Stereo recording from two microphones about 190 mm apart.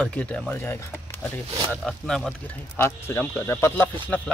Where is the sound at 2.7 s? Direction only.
10° left (ahead or behind).